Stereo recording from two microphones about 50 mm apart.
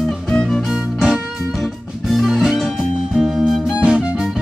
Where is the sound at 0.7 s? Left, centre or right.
Centre.